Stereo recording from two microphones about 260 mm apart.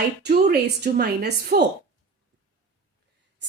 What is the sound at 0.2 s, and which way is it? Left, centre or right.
A woman's voice, right.